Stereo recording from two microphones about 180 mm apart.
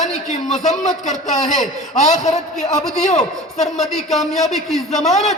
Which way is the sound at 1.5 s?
40° left (ahead or behind).